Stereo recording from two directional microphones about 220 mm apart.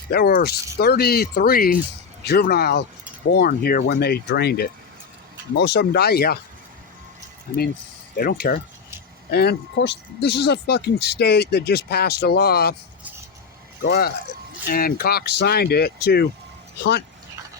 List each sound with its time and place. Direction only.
0.1 s speech: 45° left (ahead or behind)
8.1 s speech: 45° left (ahead or behind)
13.8 s speech: 45° left (ahead or behind)